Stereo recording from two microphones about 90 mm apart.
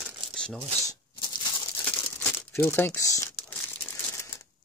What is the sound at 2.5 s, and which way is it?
Speech, 25° left (ahead or behind).